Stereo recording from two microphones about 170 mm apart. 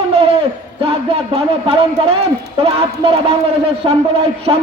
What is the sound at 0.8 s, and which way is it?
A man's voice, 35° right (ahead or behind).